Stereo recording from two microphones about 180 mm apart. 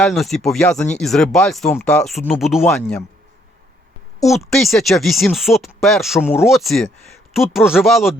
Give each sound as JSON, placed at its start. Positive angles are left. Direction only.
{"t": 0.0, "sound": "speech", "side_deg": 0}
{"t": 4.3, "sound": "speech", "side_deg": 0}